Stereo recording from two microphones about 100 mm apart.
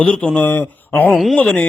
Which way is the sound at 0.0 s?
10° left (ahead or behind).